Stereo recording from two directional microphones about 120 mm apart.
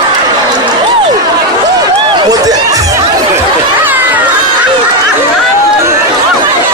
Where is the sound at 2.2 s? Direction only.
30° right (ahead or behind).